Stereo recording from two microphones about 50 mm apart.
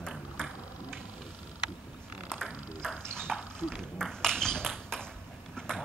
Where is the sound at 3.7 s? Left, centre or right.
Centre.